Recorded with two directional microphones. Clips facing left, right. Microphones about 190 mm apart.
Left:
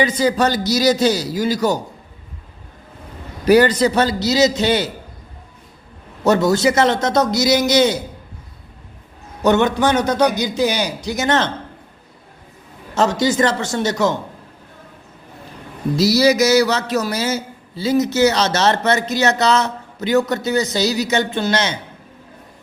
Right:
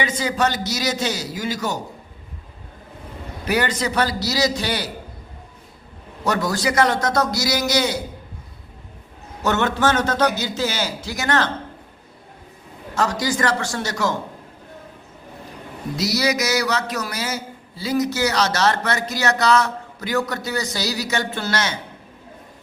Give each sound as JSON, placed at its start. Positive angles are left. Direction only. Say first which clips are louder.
{"t": 0.0, "sound": "a man's voice", "louder": "left 5 dB", "side_deg": 35}
{"t": 3.4, "sound": "a man's voice", "louder": "left 10 dB", "side_deg": 35}
{"t": 6.2, "sound": "a man's voice", "louder": "left 7 dB", "side_deg": 25}
{"t": 9.4, "sound": "a man's voice", "louder": "left 5 dB", "side_deg": 15}
{"t": 12.9, "sound": "a man's voice", "louder": "left 5 dB", "side_deg": 25}
{"t": 16.0, "sound": "a man's voice", "louder": "left 8 dB", "side_deg": 30}